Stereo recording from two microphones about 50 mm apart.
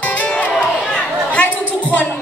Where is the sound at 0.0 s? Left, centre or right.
Left.